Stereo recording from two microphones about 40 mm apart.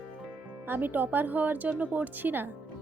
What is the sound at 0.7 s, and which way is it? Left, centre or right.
Speech, right.